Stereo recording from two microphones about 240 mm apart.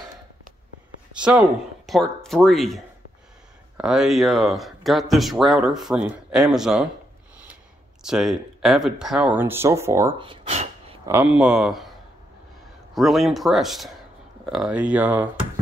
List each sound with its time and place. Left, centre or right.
1.1 s speech: centre
8.0 s speech: centre; by 11.0 s right
11.1 s speech: centre
12.9 s speech: centre